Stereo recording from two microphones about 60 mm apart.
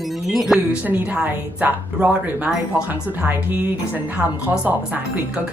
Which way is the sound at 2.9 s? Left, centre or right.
Right.